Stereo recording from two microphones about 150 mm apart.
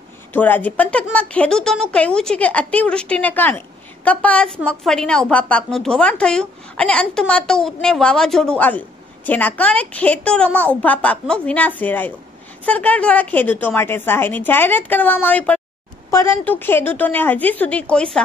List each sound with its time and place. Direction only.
0.3 s speech: 10° left (ahead or behind)